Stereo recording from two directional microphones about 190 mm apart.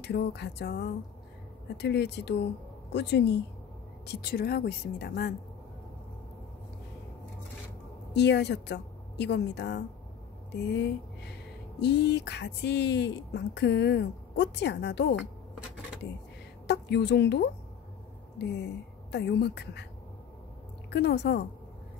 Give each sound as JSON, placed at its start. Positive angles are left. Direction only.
{"t": 0.0, "sound": "speech", "side_deg": 60}
{"t": 8.1, "sound": "a woman's voice", "side_deg": 65}
{"t": 16.6, "sound": "speech", "side_deg": 65}
{"t": 19.1, "sound": "speech", "side_deg": 60}
{"t": 20.9, "sound": "speech", "side_deg": 60}